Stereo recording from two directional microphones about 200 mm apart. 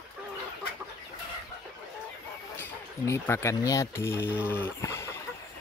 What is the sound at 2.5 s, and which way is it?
Speech, 10° left (ahead or behind).